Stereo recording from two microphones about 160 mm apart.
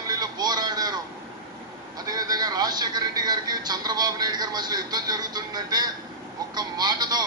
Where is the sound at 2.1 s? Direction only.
25° right (ahead or behind).